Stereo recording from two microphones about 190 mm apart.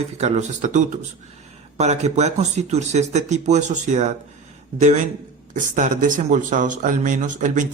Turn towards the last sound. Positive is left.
turn(degrees=-40)  # may be behind; listen again after turning